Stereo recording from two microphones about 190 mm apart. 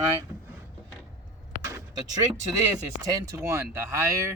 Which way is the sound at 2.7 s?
20° right (ahead or behind).